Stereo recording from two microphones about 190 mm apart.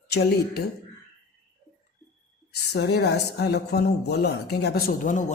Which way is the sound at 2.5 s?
60° left (ahead or behind).